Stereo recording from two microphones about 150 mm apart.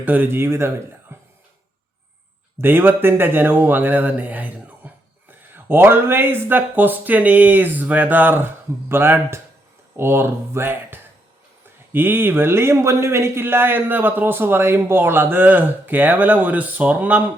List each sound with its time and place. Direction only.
0.0 s a man's voice: 10° right (ahead or behind)
1.1 s music: 15° right (ahead or behind)
2.6 s a man's voice: 15° right (ahead or behind)